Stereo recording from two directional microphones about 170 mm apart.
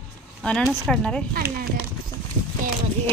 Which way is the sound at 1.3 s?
60° right (ahead or behind).